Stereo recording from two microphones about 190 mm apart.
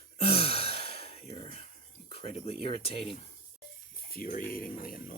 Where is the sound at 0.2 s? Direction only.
30° left (ahead or behind).